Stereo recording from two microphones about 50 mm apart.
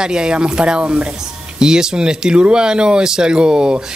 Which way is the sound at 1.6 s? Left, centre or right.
Centre.